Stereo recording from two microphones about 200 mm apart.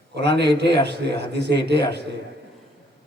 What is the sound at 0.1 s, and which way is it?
A man's voice, 60° right (ahead or behind).